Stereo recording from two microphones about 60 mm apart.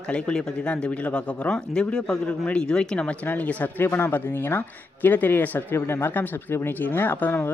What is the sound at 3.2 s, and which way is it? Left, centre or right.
A man's voice, left.